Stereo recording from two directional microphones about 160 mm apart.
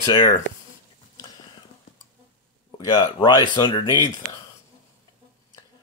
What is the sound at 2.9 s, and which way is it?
Speech, 30° left (ahead or behind).